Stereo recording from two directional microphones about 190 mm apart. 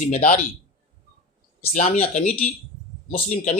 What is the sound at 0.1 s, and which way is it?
Speech, 40° left (ahead or behind).